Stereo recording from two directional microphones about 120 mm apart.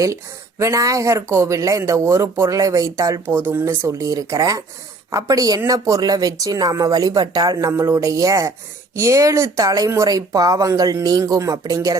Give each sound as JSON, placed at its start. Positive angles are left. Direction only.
{"t": 0.6, "sound": "speech", "side_deg": -25}